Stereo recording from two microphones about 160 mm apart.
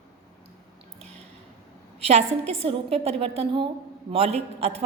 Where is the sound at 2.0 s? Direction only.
40° right (ahead or behind).